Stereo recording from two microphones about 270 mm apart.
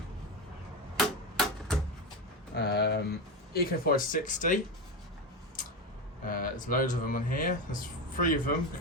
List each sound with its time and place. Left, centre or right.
0.9 s tick-tock: centre
2.6 s speech: left
6.2 s speech: left